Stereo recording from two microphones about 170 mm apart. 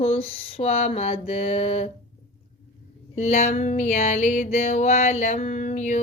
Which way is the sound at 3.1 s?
40° left (ahead or behind).